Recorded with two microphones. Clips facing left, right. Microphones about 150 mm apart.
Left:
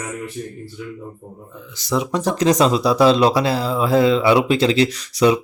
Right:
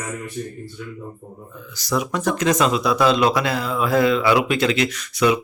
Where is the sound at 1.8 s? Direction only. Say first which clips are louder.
Left 2 dB; 25° left (ahead or behind).